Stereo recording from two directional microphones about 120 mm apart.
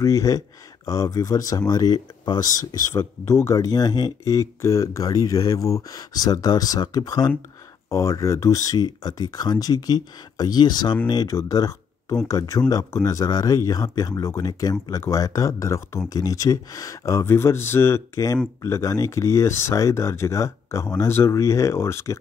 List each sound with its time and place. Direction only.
0.0 s speech: 30° left (ahead or behind)
8.7 s speech: 35° left (ahead or behind)